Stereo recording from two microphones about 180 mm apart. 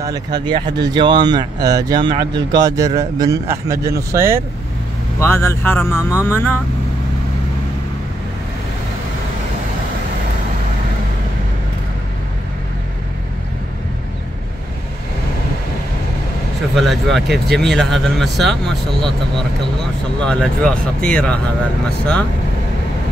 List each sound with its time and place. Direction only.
0.0 s speech: 20° right (ahead or behind)
5.2 s speech: 15° left (ahead or behind)
16.7 s speech: centre (ahead or behind)
20.2 s speech: 5° left (ahead or behind)